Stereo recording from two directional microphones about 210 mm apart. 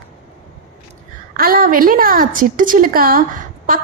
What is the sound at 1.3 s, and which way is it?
A woman's voice, 45° right (ahead or behind).